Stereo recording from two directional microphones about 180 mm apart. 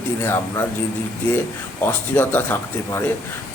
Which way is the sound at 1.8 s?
10° left (ahead or behind).